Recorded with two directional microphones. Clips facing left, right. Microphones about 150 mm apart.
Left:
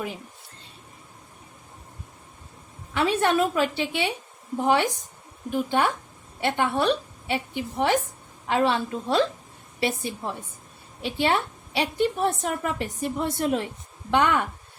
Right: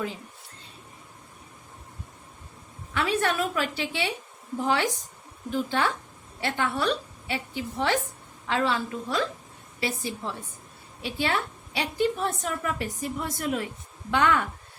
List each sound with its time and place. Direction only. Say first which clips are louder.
2.9 s a woman's voice: left 4 dB; 20° left (ahead or behind)